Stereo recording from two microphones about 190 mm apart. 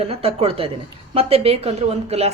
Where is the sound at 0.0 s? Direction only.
30° right (ahead or behind).